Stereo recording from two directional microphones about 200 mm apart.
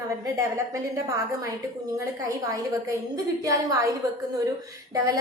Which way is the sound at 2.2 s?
15° right (ahead or behind).